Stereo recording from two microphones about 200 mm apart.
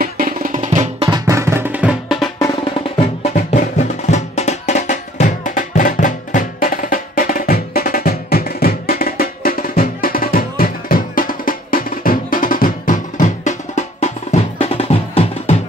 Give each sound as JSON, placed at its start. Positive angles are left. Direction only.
{"t": 0.0, "sound": "music", "side_deg": -40}
{"t": 2.6, "sound": "music", "side_deg": 30}